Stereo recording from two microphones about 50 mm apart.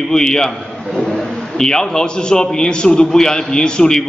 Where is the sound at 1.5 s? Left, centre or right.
Centre.